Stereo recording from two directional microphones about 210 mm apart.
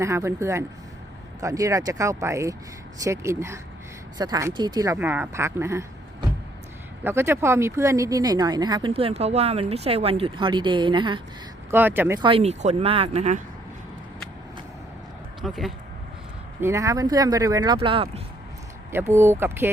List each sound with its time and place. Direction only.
0.0 s speech: 15° right (ahead or behind)
7.0 s speech: 10° right (ahead or behind)
11.7 s speech: 10° right (ahead or behind)
12.2 s speech: 30° right (ahead or behind)
15.4 s speech: centre (ahead or behind)
16.6 s speech: 10° right (ahead or behind)
18.9 s speech: 10° right (ahead or behind)